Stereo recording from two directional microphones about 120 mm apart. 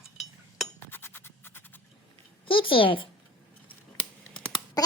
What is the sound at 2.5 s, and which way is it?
Speech, 45° left (ahead or behind).